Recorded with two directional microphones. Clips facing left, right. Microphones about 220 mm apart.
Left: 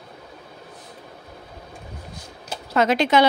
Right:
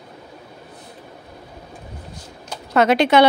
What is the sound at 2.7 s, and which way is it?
Speech, 65° right (ahead or behind).